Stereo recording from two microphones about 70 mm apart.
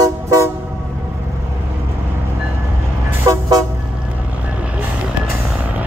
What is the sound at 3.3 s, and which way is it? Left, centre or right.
Toot, right.